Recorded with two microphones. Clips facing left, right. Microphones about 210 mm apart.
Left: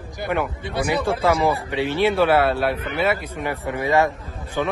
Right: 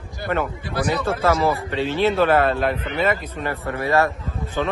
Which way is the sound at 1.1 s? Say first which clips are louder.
Even; 15° left (ahead or behind).